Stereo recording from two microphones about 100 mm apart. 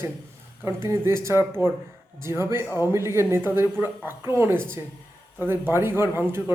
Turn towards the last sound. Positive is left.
turn(degrees=-20)  # may be behind; listen again after turning